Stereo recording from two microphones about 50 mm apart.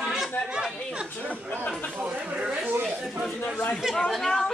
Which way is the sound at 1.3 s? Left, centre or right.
Left.